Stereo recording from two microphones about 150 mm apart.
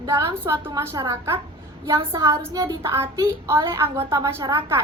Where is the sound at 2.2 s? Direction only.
20° right (ahead or behind).